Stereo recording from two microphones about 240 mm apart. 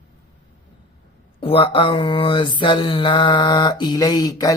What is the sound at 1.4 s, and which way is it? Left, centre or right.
Mantra, left.